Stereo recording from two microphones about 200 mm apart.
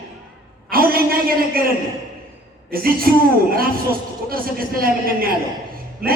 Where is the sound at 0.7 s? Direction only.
45° right (ahead or behind).